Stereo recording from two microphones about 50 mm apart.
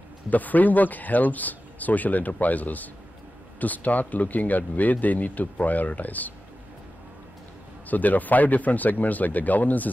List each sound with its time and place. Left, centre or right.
0.3 s speech: left
7.9 s speech: left